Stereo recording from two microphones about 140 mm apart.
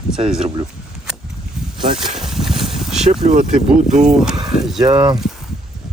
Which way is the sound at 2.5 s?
40° right (ahead or behind).